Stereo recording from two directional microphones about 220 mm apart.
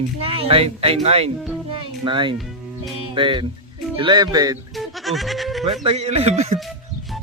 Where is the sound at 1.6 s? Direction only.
20° right (ahead or behind).